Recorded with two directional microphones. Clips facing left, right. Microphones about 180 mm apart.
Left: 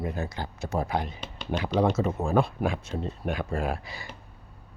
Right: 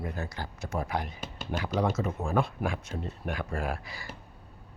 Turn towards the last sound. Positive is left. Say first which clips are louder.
# left 3 dB
turn(degrees=20)  # may be behind; listen again after turning